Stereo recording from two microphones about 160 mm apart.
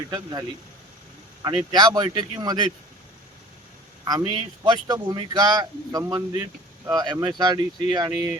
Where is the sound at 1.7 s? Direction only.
25° right (ahead or behind).